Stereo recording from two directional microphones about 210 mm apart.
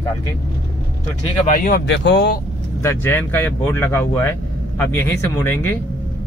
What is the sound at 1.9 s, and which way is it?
Speech, 55° left (ahead or behind).